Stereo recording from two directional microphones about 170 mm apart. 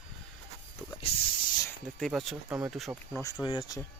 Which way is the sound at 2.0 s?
Centre (ahead or behind).